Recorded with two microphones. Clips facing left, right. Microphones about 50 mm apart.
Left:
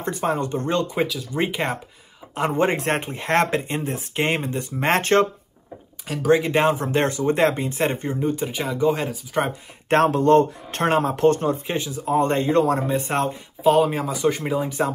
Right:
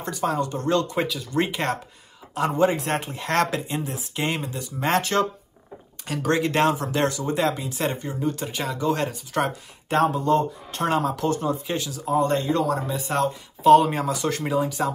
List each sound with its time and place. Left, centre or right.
0.0 s speech: left
0.9 s speech: centre
1.3 s speech: centre
2.3 s speech: left
6.0 s speech: centre
6.7 s speech: left
8.2 s speech: centre
9.8 s speech: left
11.7 s speech: left
13.6 s speech: centre